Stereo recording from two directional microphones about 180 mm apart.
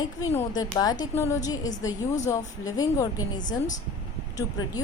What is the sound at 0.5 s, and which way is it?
Speech, 20° left (ahead or behind).